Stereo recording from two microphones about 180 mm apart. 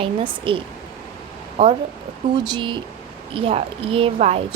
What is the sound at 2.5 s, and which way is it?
A woman's voice, 25° right (ahead or behind).